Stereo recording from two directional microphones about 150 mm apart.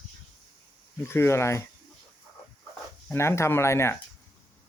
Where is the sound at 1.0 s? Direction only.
15° left (ahead or behind).